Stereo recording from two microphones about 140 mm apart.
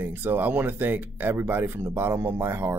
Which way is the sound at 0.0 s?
15° right (ahead or behind).